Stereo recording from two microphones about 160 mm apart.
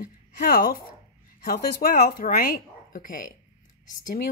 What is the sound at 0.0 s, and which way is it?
A woman's voice, 60° left (ahead or behind).